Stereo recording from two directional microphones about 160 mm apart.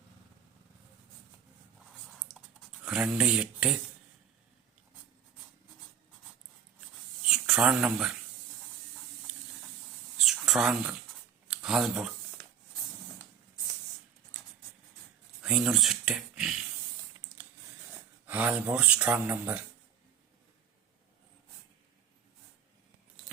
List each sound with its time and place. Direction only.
2.8 s speech: 5° right (ahead or behind)
7.3 s speech: 5° right (ahead or behind)
10.2 s a sound: centre (ahead or behind)
11.4 s speech: 5° right (ahead or behind)
14.3 s patter: 5° right (ahead or behind)
15.4 s speech: 5° right (ahead or behind)
17.2 s a sound: 10° right (ahead or behind)
18.3 s speech: 10° right (ahead or behind)